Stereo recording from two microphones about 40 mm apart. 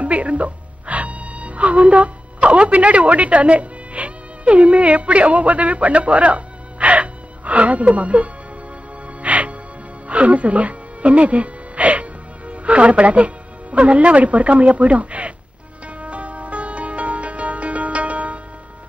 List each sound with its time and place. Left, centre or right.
0.0 s music: right
10.0 s speech: right
16.0 s music: right